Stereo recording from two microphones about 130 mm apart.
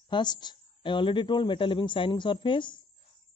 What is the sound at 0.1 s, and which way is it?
Speech, 35° left (ahead or behind).